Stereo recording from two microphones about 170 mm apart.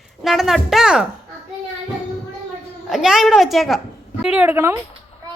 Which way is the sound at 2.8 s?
Centre (ahead or behind).